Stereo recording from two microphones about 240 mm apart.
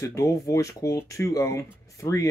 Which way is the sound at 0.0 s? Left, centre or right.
Centre.